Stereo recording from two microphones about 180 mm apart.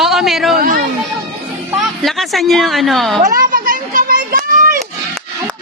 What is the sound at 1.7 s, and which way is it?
Speech, centre (ahead or behind).